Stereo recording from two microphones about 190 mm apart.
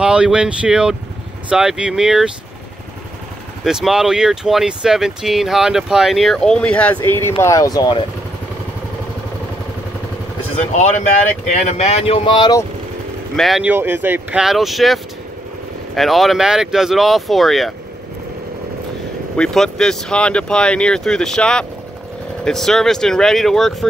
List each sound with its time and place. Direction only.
0.0 s speech: 5° right (ahead or behind)
3.6 s speech: 5° right (ahead or behind); by 8.0 s 20° left (ahead or behind)
10.8 s speech: 40° left (ahead or behind); by 12.6 s 20° left (ahead or behind)
13.4 s speech: centre (ahead or behind)
19.3 s speech: 5° left (ahead or behind)